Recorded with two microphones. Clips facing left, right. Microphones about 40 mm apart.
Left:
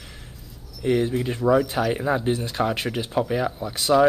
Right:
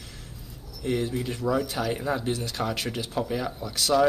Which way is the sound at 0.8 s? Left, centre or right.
Centre.